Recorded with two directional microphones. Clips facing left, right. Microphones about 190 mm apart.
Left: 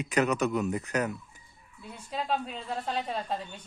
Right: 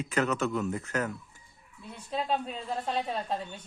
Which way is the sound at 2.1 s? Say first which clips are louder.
Right 1 dB; centre (ahead or behind).